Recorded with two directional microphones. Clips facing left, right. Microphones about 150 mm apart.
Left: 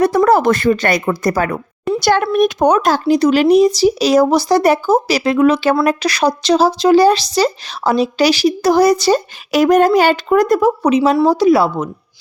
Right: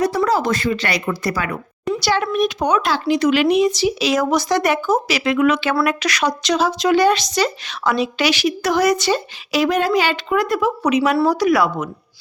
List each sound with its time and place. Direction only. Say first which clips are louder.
0.0 s speech: left 6 dB; 55° left (ahead or behind); by 11.9 s 30° left (ahead or behind)